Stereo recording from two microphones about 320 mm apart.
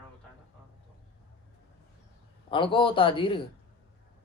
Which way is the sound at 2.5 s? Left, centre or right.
Centre.